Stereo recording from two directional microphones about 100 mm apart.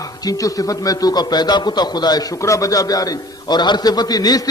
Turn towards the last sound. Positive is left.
turn(degrees=40)  # may be behind; listen again after turning